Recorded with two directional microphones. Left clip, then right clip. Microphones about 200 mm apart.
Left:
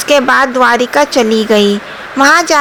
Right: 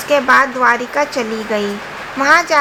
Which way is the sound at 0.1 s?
40° left (ahead or behind).